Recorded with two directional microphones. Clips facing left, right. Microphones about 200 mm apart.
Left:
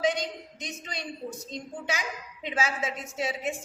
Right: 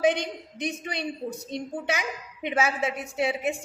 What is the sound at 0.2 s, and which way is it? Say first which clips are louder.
A woman's voice: right 4 dB; 60° right (ahead or behind).